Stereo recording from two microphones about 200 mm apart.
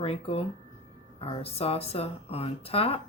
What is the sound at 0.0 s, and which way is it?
Speech, 30° left (ahead or behind).